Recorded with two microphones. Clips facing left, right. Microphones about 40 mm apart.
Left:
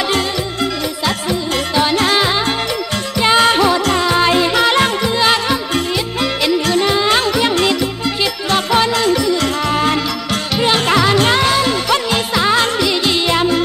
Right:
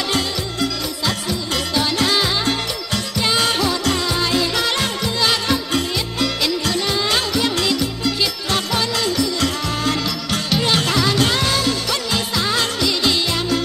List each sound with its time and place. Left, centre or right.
1.8 s music: left